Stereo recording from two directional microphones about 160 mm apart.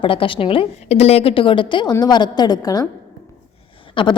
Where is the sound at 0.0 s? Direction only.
35° left (ahead or behind).